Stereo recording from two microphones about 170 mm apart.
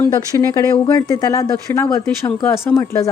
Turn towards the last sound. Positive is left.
turn(degrees=15)  # may be behind; listen again after turning